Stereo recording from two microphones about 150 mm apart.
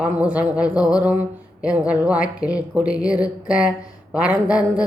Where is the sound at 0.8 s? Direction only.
25° left (ahead or behind).